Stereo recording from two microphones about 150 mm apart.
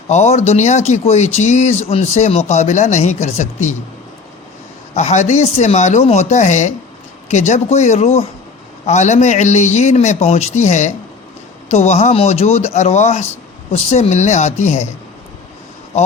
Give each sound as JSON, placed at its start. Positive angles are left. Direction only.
{"t": 0.1, "sound": "speech", "side_deg": 50}
{"t": 4.9, "sound": "speech", "side_deg": 50}